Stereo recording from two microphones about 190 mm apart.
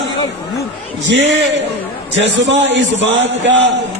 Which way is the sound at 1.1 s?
75° right (ahead or behind).